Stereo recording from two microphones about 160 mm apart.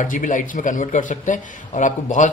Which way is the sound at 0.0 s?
55° left (ahead or behind).